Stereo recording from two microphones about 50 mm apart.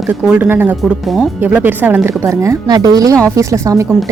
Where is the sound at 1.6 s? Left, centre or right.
Right.